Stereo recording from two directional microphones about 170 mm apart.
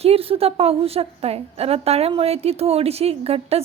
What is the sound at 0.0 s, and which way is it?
A woman's voice, 35° right (ahead or behind).